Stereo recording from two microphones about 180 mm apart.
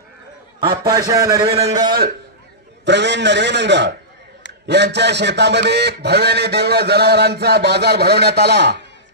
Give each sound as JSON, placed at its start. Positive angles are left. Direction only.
{"t": 0.6, "sound": "a man's voice", "side_deg": -25}
{"t": 2.8, "sound": "a man's voice", "side_deg": -75}